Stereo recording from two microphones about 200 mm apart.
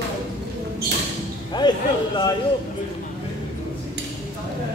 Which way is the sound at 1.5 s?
20° left (ahead or behind).